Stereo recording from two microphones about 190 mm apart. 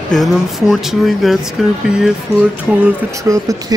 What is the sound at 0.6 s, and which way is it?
Speech, centre (ahead or behind).